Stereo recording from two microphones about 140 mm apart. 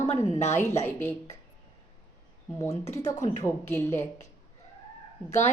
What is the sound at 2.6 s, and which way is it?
A woman's voice, 20° left (ahead or behind).